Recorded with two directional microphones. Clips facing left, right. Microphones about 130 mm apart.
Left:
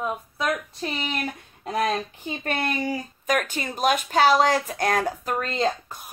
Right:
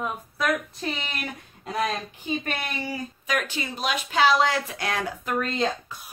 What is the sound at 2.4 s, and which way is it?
Speech, 45° left (ahead or behind).